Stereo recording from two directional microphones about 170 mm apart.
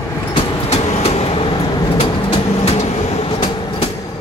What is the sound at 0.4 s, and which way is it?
Vehicle, 40° left (ahead or behind).